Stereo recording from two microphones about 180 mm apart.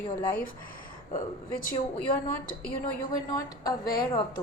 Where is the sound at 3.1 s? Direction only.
20° left (ahead or behind).